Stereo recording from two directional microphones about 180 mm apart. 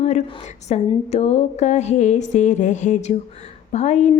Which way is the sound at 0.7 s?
35° left (ahead or behind).